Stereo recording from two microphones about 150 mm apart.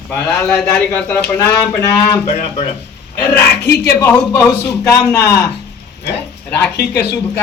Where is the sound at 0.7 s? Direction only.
20° left (ahead or behind).